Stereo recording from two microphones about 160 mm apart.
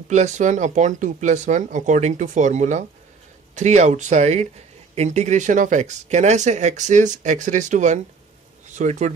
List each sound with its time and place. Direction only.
0.1 s speech: 50° right (ahead or behind)